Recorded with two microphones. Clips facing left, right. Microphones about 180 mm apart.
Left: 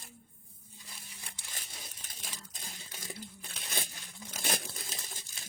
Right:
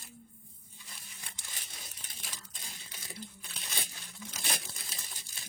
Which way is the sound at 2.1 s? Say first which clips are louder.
Left 1 dB; 45° left (ahead or behind).